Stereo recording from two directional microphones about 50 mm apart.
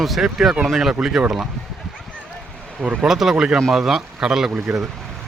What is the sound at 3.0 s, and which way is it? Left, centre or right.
Speech, centre.